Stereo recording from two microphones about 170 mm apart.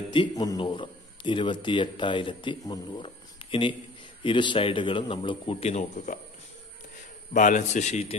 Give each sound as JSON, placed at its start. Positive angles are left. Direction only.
{"t": 0.1, "sound": "a man's voice", "side_deg": 25}
{"t": 4.2, "sound": "a man's voice", "side_deg": 30}
{"t": 7.3, "sound": "a man's voice", "side_deg": 45}